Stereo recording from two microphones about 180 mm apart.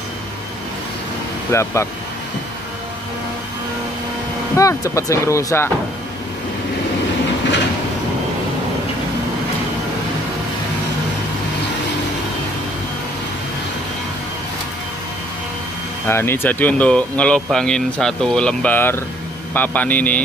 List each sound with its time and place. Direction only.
1.5 s speech: 15° left (ahead or behind)
4.6 s speech: 15° left (ahead or behind)
16.1 s speech: 15° left (ahead or behind)